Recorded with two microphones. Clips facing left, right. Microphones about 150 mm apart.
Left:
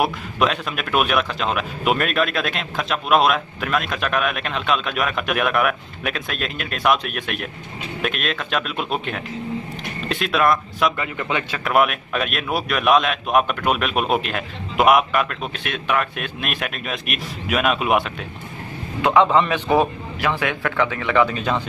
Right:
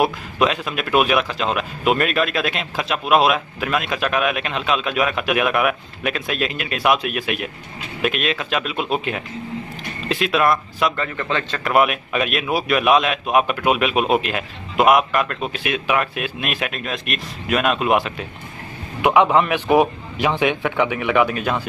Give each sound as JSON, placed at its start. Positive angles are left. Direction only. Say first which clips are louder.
{"t": 0.0, "sound": "speech", "louder": "right 2 dB", "side_deg": 0}
{"t": 11.0, "sound": "a man's voice", "louder": "right 1 dB", "side_deg": 15}
{"t": 11.6, "sound": "speech", "louder": "right 1 dB", "side_deg": 0}
{"t": 18.9, "sound": "a man's voice", "louder": "right 1 dB", "side_deg": -15}